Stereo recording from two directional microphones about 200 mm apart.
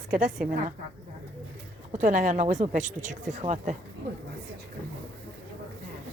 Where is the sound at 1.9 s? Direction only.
40° right (ahead or behind).